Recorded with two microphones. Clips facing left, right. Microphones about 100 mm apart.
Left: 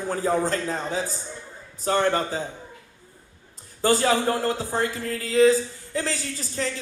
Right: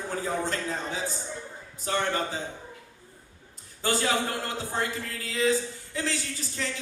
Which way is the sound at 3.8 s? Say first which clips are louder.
Left 6 dB; 40° left (ahead or behind).